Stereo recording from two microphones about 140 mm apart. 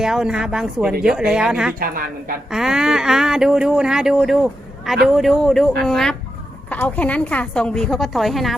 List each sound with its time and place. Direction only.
0.0 s speech: 5° right (ahead or behind)
1.8 s a woman's voice: 90° right
2.5 s a woman's voice: 5° right (ahead or behind)